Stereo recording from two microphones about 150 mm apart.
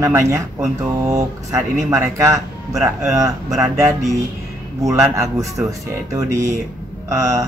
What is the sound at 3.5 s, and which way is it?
Speech, 20° right (ahead or behind).